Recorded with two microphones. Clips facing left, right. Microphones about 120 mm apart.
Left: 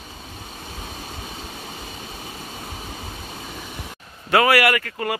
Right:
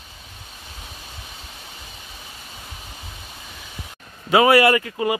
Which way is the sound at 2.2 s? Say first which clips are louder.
Left 6 dB; 55° left (ahead or behind).